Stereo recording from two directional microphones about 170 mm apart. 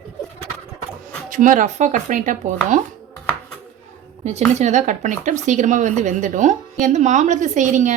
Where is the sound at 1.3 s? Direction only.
50° right (ahead or behind).